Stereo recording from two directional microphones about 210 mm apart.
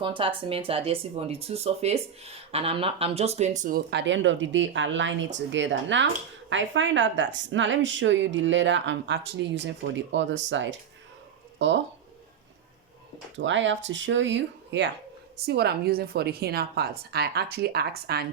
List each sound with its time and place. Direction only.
0.0 s speech: 25° right (ahead or behind); by 11.8 s 60° right (ahead or behind)
13.4 s a woman's voice: 60° right (ahead or behind)